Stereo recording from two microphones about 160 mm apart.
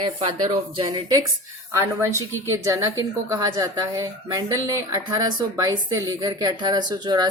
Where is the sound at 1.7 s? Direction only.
20° right (ahead or behind).